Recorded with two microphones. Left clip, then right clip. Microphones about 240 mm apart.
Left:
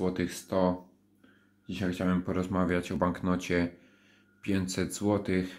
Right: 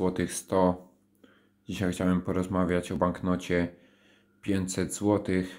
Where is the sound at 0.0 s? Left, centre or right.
Right.